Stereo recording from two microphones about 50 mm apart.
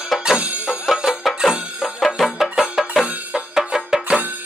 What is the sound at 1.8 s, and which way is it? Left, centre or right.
Music, centre.